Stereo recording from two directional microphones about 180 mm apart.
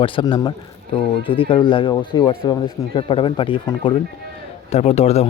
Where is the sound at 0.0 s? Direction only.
25° left (ahead or behind).